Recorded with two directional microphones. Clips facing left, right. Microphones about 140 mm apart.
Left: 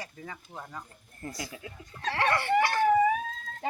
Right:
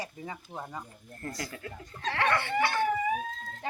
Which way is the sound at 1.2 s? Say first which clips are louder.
Right 1 dB; 15° left (ahead or behind).